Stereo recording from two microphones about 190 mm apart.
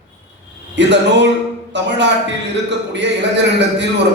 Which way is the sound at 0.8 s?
65° right (ahead or behind).